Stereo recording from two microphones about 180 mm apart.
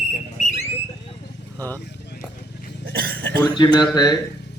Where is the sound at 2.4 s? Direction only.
60° left (ahead or behind).